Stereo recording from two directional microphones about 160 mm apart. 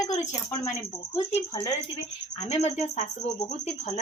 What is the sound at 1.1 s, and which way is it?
A woman's voice, 35° left (ahead or behind).